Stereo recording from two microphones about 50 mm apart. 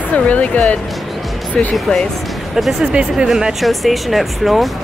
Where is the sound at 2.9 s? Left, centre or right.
Centre.